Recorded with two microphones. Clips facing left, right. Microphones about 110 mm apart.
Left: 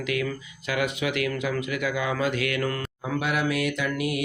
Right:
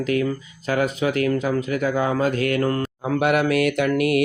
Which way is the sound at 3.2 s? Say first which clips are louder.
Right 7 dB; 60° right (ahead or behind).